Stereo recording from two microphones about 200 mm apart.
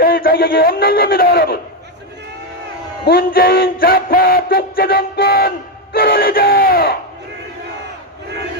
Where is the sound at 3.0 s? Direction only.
50° left (ahead or behind).